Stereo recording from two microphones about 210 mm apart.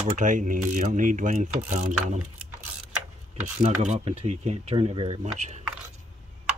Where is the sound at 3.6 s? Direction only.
30° right (ahead or behind).